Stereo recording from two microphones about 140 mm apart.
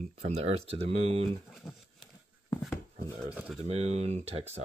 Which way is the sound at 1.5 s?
Centre (ahead or behind).